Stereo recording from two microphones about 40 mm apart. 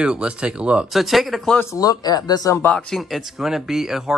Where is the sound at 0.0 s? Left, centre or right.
Right.